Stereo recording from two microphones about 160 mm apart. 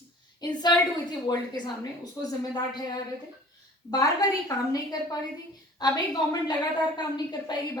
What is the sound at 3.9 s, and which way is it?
A woman's voice, 20° left (ahead or behind).